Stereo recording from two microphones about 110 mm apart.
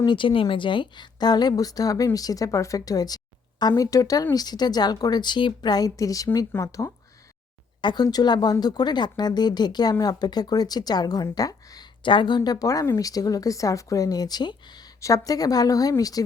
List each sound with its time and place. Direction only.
0.0 s a woman's voice: 45° left (ahead or behind); by 6.9 s 30° left (ahead or behind)
7.8 s a woman's voice: 40° left (ahead or behind)
12.0 s a woman's voice: 45° left (ahead or behind)